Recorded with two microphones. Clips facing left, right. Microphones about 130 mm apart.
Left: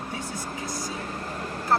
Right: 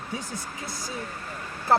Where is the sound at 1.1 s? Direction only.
40° left (ahead or behind).